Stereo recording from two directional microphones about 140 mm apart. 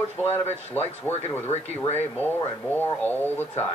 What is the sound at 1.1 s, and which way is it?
Speech, 15° left (ahead or behind).